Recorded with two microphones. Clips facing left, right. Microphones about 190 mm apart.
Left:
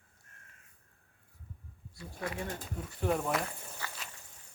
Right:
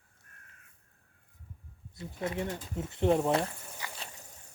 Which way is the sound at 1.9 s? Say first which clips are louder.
Right 4 dB; 25° right (ahead or behind).